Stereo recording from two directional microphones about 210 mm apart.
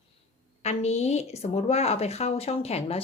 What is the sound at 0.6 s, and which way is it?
A woman's voice, 30° left (ahead or behind).